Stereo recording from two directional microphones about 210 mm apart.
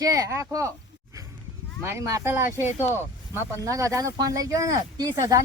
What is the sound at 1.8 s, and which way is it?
Speech, 15° right (ahead or behind).